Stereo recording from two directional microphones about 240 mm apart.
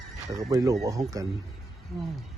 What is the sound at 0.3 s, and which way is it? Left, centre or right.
Speech, centre.